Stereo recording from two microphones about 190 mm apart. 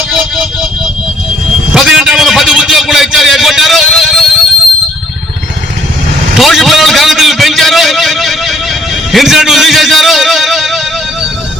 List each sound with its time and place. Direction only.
0.1 s vehicle: 5° right (ahead or behind)
1.7 s a sound: 5° right (ahead or behind)
6.3 s vehicle: centre (ahead or behind)
9.1 s music: centre (ahead or behind)